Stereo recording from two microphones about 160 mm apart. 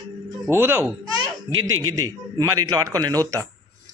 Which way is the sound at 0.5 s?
15° right (ahead or behind).